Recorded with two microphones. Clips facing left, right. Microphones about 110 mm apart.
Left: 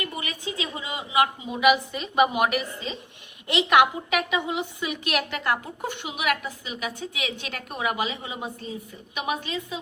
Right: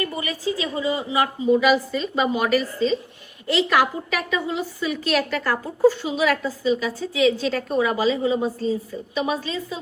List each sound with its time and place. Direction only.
0.2 s a woman's voice: 20° left (ahead or behind)
8.5 s a woman's voice: 35° right (ahead or behind)
9.1 s a woman's voice: 20° left (ahead or behind)